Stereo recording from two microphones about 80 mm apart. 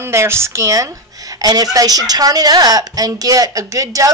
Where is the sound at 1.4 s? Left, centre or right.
Right.